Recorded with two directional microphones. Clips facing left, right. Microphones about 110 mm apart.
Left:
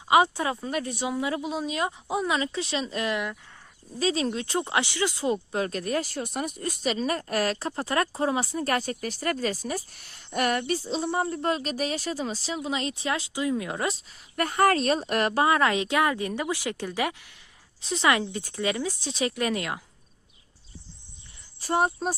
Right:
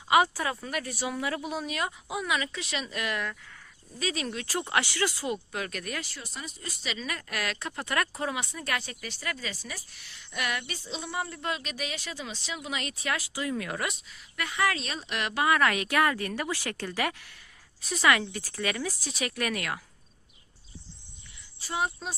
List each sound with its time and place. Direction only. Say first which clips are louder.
0.1 s speech: left 3 dB; 25° left (ahead or behind)
21.6 s speech: left 7 dB; 50° left (ahead or behind)